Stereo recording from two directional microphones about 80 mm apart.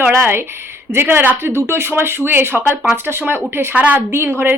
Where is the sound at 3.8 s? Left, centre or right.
Centre.